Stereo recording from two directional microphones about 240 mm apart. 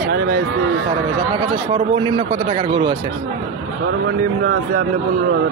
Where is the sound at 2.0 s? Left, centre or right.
Right.